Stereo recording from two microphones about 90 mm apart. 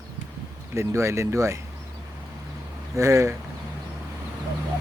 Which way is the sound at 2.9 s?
35° right (ahead or behind).